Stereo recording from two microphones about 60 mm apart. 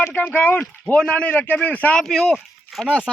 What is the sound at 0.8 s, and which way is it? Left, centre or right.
A man's voice, centre.